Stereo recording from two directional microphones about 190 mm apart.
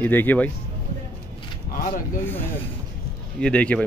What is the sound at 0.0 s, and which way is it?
Speech, 10° left (ahead or behind).